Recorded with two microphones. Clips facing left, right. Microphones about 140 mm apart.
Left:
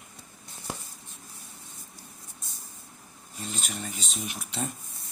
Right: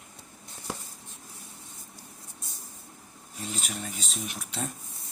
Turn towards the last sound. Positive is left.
turn(degrees=0)  # may be behind; listen again after turning